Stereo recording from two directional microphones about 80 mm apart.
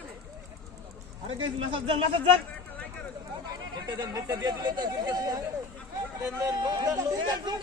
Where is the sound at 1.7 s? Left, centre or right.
Right.